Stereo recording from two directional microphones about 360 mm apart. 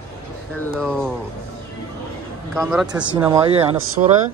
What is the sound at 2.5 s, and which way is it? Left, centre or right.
Speech, centre.